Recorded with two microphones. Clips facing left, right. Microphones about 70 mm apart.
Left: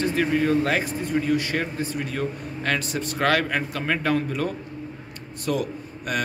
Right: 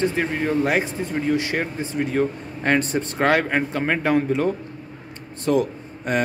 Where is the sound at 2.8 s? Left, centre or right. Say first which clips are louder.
Right 6 dB; right.